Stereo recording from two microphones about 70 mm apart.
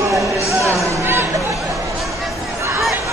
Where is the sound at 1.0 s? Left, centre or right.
Right.